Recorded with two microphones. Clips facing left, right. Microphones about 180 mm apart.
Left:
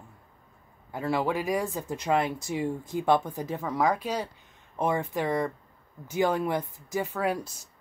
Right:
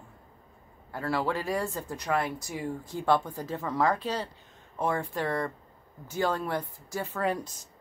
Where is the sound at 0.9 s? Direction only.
15° left (ahead or behind).